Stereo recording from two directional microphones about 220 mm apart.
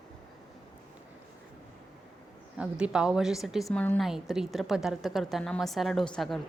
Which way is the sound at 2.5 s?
5° right (ahead or behind).